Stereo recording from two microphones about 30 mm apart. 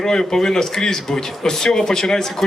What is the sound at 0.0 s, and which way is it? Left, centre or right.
A man's voice, left.